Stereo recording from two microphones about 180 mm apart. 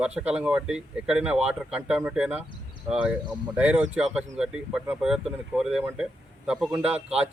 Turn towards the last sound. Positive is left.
turn(degrees=-35)  # may be behind; listen again after turning